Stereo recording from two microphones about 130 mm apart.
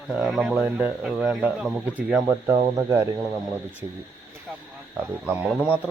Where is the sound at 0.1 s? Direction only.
Centre (ahead or behind).